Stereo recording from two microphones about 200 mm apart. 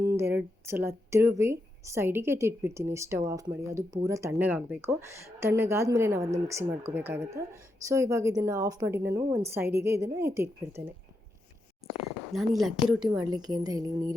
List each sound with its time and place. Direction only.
0.2 s a woman's voice: 10° right (ahead or behind)
12.3 s speech: centre (ahead or behind)
13.0 s a woman's voice: 20° right (ahead or behind)